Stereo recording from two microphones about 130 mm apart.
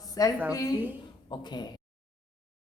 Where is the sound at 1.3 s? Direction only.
35° left (ahead or behind).